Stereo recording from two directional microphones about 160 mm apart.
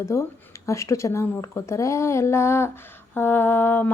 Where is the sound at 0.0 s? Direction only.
20° left (ahead or behind).